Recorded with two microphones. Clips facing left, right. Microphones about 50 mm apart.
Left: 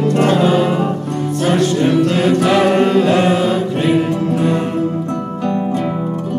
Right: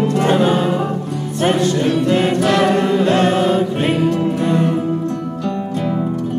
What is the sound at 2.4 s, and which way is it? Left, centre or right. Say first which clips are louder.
Chant: left 2 dB; centre.